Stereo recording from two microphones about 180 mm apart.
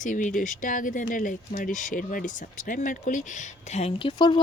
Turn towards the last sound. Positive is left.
turn(degrees=25)  # may be behind; listen again after turning